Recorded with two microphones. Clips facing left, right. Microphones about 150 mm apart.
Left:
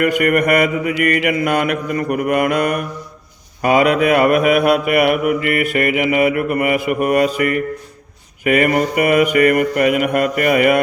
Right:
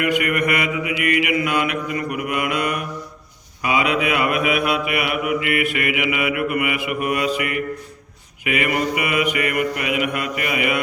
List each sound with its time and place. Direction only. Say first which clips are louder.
0.0 s mantra: left 5 dB; 45° left (ahead or behind)